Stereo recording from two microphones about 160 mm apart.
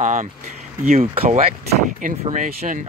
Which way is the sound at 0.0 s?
50° right (ahead or behind).